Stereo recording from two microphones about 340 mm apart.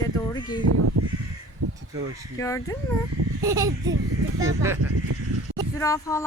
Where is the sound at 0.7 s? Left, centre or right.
Right.